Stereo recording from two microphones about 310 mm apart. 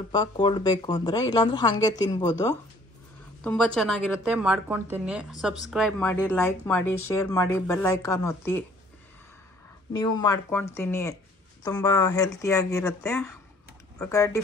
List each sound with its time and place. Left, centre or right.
0.1 s a woman's voice: centre
9.9 s a woman's voice: centre